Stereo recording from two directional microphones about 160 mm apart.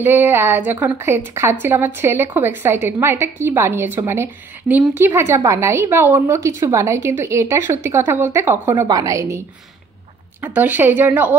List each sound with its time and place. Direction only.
0.0 s a woman's voice: 15° right (ahead or behind)
10.4 s a woman's voice: 10° right (ahead or behind)